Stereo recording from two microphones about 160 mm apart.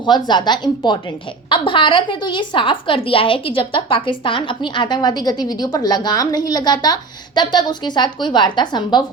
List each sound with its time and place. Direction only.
0.0 s a woman's voice: 30° left (ahead or behind)